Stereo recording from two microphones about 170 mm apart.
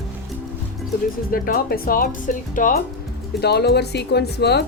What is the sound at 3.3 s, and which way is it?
Speech, 75° left (ahead or behind).